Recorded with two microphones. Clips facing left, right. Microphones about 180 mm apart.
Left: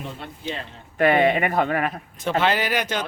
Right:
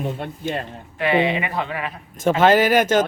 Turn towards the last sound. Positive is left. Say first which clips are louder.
# right 9 dB
turn(degrees=-45)  # may be behind; listen again after turning